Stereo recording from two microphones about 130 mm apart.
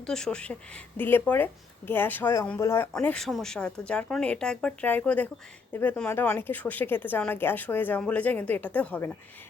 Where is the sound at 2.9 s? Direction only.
5° left (ahead or behind).